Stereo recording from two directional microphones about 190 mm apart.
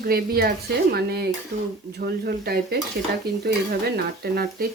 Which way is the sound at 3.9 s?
55° right (ahead or behind).